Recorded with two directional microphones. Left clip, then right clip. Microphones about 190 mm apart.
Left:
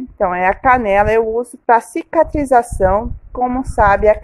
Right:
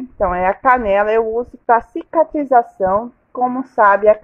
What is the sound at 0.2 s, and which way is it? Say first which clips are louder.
A woman's voice: left 1 dB; 20° left (ahead or behind).